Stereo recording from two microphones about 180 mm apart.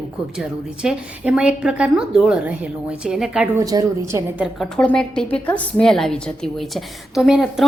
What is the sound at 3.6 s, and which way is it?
Speech, 20° right (ahead or behind).